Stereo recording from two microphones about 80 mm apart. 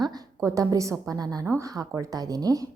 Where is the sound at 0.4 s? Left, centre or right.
Right.